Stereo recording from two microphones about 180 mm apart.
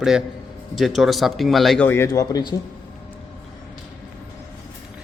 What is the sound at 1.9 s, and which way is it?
Speech, 15° left (ahead or behind).